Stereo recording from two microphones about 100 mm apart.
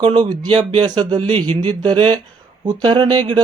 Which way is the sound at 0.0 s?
55° right (ahead or behind).